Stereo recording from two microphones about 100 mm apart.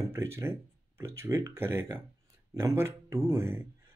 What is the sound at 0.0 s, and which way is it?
Speech, 30° right (ahead or behind).